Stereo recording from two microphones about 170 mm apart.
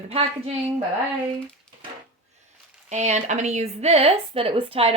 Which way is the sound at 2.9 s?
40° right (ahead or behind).